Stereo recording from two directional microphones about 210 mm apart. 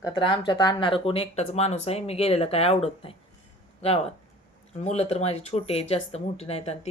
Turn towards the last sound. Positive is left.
turn(degrees=30)  # may be behind; listen again after turning